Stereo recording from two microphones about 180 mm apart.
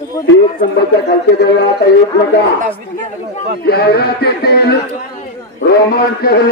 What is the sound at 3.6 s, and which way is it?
A man's voice, 60° left (ahead or behind).